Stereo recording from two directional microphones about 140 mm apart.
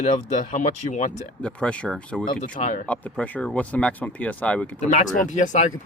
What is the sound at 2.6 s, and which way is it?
Speech, 55° left (ahead or behind).